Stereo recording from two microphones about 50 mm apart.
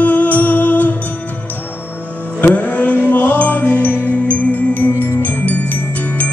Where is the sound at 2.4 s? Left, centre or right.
Left.